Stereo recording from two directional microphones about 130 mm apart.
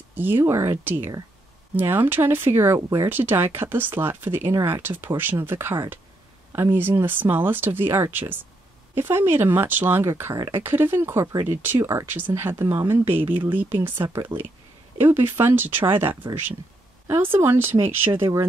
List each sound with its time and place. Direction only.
0.1 s speech: 15° right (ahead or behind)